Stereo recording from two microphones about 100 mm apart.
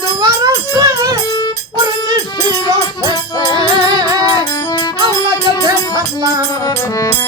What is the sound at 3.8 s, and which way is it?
Music, 40° right (ahead or behind).